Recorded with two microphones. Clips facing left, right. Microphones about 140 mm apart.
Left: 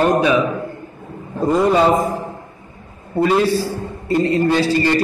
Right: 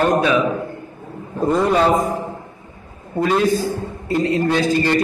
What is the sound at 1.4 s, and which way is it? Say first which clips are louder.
Speech: left 2 dB; 5° left (ahead or behind).